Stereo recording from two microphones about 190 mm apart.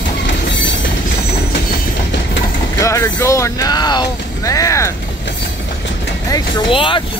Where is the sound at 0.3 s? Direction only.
70° left (ahead or behind).